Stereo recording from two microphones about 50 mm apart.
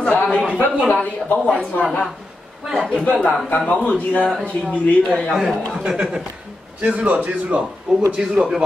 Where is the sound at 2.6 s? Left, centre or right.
Centre.